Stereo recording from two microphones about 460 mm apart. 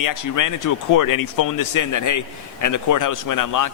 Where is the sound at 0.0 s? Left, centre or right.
Left.